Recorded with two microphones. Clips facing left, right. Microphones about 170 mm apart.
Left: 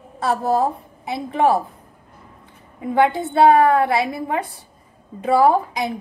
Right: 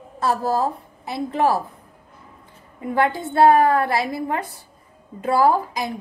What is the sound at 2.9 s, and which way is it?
A woman's voice, 20° left (ahead or behind).